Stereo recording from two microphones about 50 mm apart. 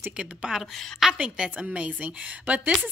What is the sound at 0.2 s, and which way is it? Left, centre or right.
Speech, centre.